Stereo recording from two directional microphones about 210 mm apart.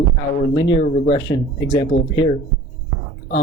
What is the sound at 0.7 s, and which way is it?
Speech, 25° left (ahead or behind).